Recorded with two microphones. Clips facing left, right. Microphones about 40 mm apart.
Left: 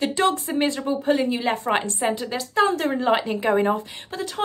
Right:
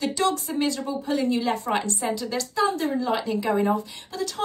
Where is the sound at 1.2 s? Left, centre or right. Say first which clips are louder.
Left 1 dB; left.